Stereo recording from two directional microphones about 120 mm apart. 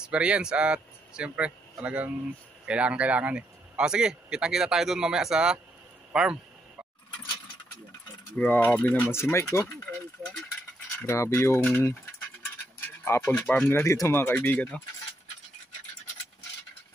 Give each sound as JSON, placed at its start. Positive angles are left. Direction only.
{"t": 0.0, "sound": "speech", "side_deg": -10}
{"t": 8.4, "sound": "speech", "side_deg": 15}
{"t": 11.0, "sound": "speech", "side_deg": 20}
{"t": 12.8, "sound": "a sound", "side_deg": 20}
{"t": 13.4, "sound": "speech", "side_deg": 10}
{"t": 13.7, "sound": "speech", "side_deg": 20}